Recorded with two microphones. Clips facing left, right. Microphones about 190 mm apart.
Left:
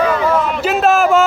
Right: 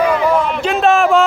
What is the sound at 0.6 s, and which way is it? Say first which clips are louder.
Speech: even; 5° left (ahead or behind).